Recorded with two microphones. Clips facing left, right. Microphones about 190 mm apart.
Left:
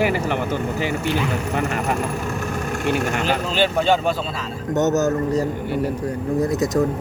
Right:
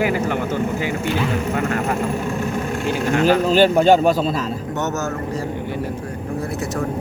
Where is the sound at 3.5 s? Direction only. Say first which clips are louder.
Right 4 dB; 45° right (ahead or behind).